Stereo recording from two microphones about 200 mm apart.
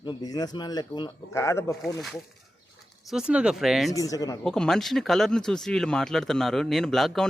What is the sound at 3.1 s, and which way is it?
Speech, 5° right (ahead or behind).